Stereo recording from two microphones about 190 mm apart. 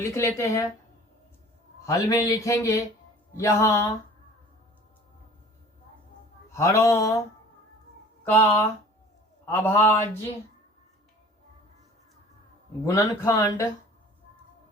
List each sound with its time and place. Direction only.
0.0 s speech: 15° left (ahead or behind)
1.9 s speech: 15° left (ahead or behind)
6.5 s speech: 15° left (ahead or behind)
8.3 s speech: 15° left (ahead or behind)
12.8 s speech: 15° left (ahead or behind)